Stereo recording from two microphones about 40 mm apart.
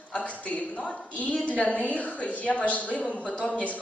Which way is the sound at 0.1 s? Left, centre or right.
Left.